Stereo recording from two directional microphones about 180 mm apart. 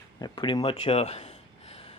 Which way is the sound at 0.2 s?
25° left (ahead or behind).